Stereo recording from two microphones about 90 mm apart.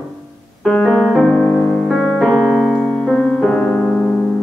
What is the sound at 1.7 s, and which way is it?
Piano, 5° left (ahead or behind).